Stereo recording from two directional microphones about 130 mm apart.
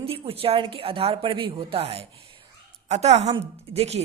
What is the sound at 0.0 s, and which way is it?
A woman's voice, 50° right (ahead or behind).